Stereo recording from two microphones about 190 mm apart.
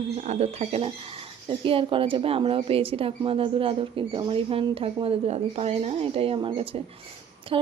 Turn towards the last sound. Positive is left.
turn(degrees=-25)  # may be behind; listen again after turning